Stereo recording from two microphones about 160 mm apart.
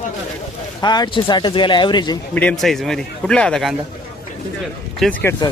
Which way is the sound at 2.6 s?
Centre (ahead or behind).